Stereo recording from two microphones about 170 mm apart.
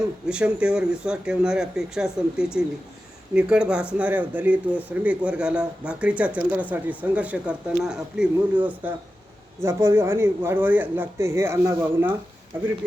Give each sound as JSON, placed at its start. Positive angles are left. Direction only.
{"t": 0.3, "sound": "speech", "side_deg": -5}